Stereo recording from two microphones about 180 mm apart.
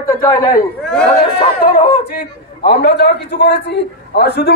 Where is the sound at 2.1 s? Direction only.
65° left (ahead or behind).